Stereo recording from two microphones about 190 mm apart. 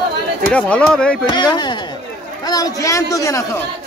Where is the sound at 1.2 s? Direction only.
25° left (ahead or behind).